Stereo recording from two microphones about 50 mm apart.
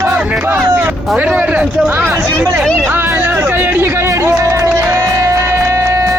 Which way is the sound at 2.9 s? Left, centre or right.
Right.